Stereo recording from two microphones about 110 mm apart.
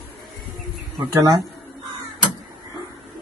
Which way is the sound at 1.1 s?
30° right (ahead or behind).